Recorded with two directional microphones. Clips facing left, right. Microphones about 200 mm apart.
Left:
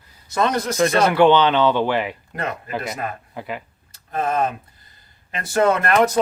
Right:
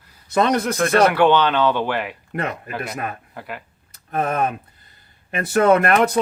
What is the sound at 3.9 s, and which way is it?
Tick, 60° right (ahead or behind).